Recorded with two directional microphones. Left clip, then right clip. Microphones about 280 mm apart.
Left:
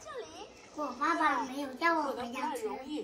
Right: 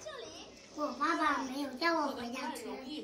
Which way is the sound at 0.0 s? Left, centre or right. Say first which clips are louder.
Left 2 dB; left.